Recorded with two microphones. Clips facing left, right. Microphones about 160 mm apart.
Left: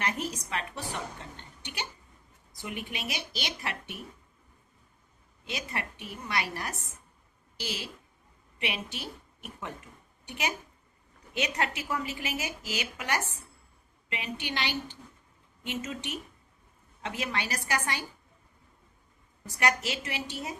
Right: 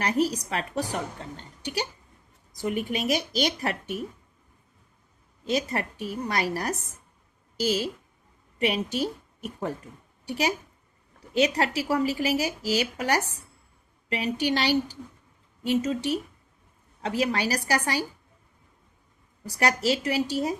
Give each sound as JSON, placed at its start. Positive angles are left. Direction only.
{"t": 0.0, "sound": "a woman's voice", "side_deg": -35}
{"t": 5.5, "sound": "a woman's voice", "side_deg": -40}
{"t": 19.5, "sound": "a woman's voice", "side_deg": -40}